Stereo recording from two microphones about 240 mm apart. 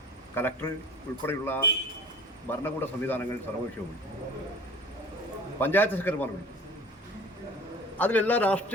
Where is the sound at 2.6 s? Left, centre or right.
Centre.